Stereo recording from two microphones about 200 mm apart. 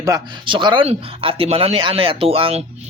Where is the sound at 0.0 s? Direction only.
20° right (ahead or behind).